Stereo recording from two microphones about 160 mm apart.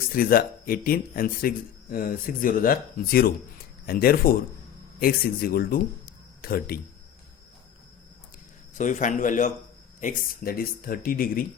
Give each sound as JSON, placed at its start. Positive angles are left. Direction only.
{"t": 0.1, "sound": "speech", "side_deg": 65}
{"t": 8.8, "sound": "a man's voice", "side_deg": 50}